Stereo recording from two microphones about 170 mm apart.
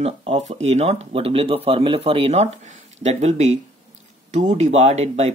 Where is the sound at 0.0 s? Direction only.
35° right (ahead or behind).